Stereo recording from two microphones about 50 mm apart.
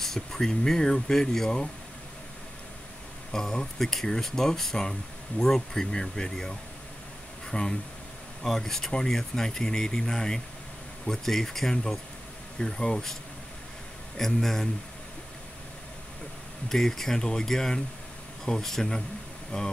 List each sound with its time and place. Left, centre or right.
0.0 s speech: centre
3.3 s speech: centre
7.5 s speech: centre
8.4 s speech: centre
16.6 s speech: centre